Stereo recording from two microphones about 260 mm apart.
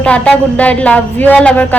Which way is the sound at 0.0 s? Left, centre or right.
Centre.